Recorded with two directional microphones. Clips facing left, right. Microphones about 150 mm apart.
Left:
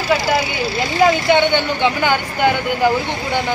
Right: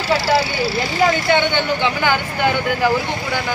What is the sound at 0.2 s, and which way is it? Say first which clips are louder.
Speech: right 1 dB; 15° left (ahead or behind).